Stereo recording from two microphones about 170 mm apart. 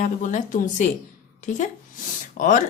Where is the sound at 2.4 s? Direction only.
50° left (ahead or behind).